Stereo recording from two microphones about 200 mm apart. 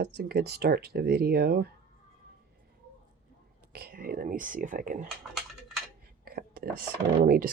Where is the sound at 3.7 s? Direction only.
50° right (ahead or behind).